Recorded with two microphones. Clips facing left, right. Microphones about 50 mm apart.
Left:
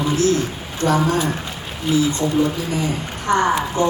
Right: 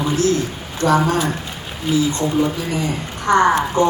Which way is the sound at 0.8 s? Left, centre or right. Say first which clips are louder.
Right 2 dB; right.